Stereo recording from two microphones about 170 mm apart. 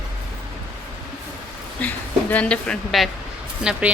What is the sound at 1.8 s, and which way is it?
A woman's voice, 10° left (ahead or behind).